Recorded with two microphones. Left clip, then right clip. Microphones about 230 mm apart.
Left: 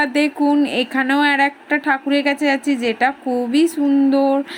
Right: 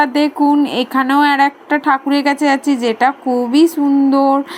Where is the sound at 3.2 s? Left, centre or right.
Centre.